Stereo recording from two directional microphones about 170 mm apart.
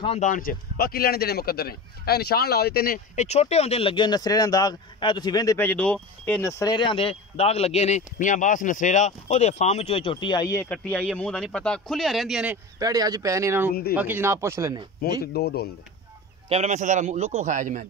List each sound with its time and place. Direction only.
0.0 s speech: 35° left (ahead or behind)
0.3 s speech: 55° left (ahead or behind)
3.2 s speech: 40° left (ahead or behind); by 6.4 s 5° left (ahead or behind)
6.4 s speech: 20° left (ahead or behind)
10.7 s speech: 5° left (ahead or behind)
12.7 s speech: 20° right (ahead or behind)
15.3 s speech: 70° left (ahead or behind)
16.4 s a man's voice: 40° right (ahead or behind)